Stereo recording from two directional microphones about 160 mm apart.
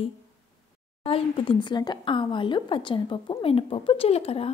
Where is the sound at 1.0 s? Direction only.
35° left (ahead or behind).